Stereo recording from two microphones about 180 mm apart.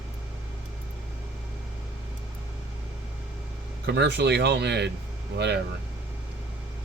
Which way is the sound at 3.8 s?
70° right (ahead or behind).